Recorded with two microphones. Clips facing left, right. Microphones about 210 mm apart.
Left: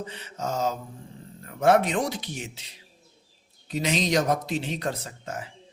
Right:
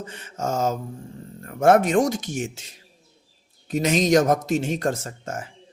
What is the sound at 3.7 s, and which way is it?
Speech, 45° right (ahead or behind).